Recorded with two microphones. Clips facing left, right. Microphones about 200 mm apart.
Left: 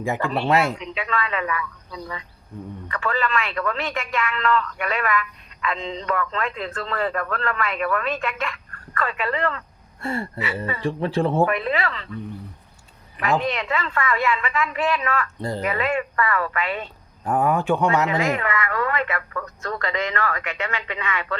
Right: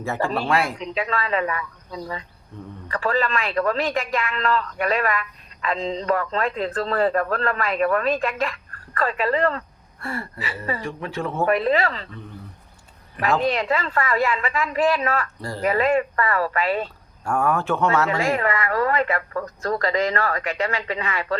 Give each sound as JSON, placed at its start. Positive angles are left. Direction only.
{"t": 0.4, "sound": "speech", "side_deg": 25}
{"t": 0.8, "sound": "a man's voice", "side_deg": -35}
{"t": 10.0, "sound": "speech", "side_deg": 25}
{"t": 11.4, "sound": "a man's voice", "side_deg": -35}
{"t": 13.4, "sound": "a man's voice", "side_deg": -35}
{"t": 15.4, "sound": "speech", "side_deg": 20}
{"t": 15.6, "sound": "a man's voice", "side_deg": -35}
{"t": 17.2, "sound": "speech", "side_deg": 15}
{"t": 18.2, "sound": "a man's voice", "side_deg": -35}